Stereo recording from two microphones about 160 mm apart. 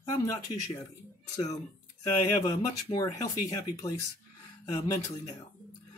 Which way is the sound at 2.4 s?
25° left (ahead or behind).